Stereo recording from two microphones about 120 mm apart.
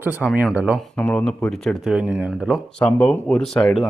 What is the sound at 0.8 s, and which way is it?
Speech, 10° left (ahead or behind).